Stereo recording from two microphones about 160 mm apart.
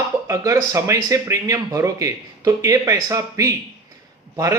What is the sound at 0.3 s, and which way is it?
Speech, 20° right (ahead or behind).